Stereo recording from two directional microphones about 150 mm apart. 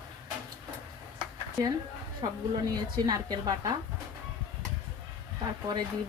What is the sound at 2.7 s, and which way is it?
Speech, 25° right (ahead or behind).